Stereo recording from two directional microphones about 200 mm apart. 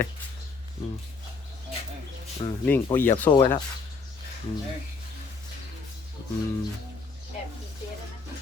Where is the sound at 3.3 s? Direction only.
20° left (ahead or behind).